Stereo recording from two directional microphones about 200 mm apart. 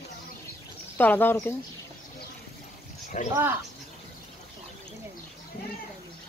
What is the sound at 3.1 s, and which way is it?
Speech, 40° left (ahead or behind).